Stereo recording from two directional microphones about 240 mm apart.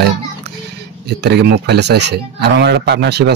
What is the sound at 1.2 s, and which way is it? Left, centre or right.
A man's voice, right.